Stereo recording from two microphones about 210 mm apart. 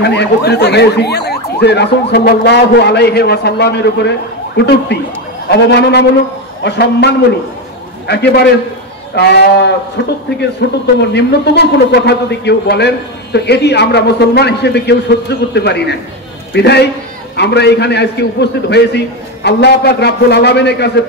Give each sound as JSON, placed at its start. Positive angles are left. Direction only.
{"t": 0.0, "sound": "a man's voice", "side_deg": 55}